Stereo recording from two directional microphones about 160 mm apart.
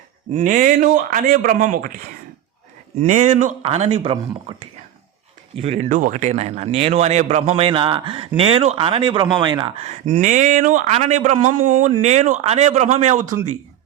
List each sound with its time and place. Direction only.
0.3 s speech: 55° right (ahead or behind)
3.1 s a man's voice: 45° right (ahead or behind)